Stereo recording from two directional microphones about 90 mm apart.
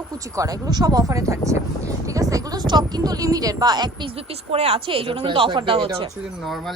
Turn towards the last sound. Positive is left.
turn(degrees=0)  # may be behind; listen again after turning